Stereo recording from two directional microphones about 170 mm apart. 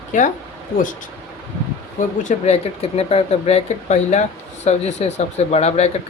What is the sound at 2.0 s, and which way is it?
Speech, 45° left (ahead or behind).